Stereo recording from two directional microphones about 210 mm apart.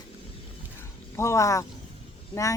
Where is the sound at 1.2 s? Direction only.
15° left (ahead or behind).